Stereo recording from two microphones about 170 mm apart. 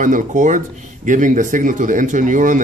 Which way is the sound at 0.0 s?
50° right (ahead or behind).